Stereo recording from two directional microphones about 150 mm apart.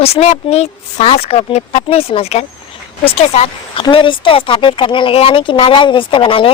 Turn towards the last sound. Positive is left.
turn(degrees=35)  # may be behind; listen again after turning